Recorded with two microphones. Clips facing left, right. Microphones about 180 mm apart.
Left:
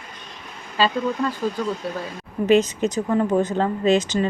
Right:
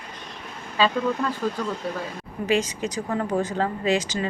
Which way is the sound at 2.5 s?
20° left (ahead or behind).